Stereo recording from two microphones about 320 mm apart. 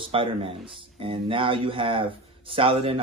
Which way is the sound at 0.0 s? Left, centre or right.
Centre.